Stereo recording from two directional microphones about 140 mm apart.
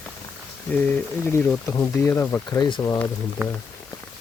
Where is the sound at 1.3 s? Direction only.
20° left (ahead or behind).